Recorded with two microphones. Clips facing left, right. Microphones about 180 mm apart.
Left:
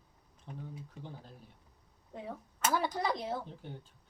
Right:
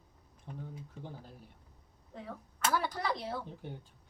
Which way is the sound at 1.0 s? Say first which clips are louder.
Right 3 dB; 15° left (ahead or behind).